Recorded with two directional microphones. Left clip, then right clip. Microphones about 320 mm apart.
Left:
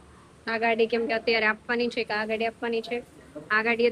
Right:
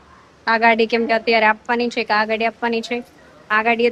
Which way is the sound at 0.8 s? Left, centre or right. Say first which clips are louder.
Right 7 dB; centre.